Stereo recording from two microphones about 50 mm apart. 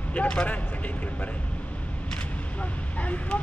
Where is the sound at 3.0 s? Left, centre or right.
Left.